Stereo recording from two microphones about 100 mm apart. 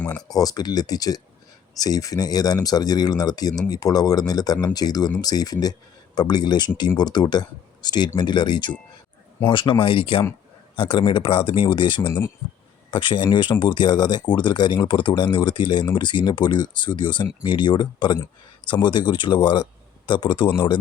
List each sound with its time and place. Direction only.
0.3 s speech: 40° left (ahead or behind)